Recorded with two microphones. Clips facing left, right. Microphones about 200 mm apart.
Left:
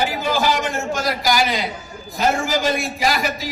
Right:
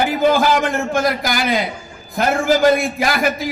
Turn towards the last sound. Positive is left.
turn(degrees=-55)  # may be behind; listen again after turning